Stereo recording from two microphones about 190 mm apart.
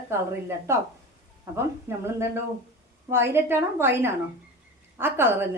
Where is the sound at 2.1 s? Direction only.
15° right (ahead or behind).